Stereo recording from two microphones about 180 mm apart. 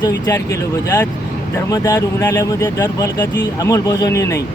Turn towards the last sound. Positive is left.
turn(degrees=15)  # may be behind; listen again after turning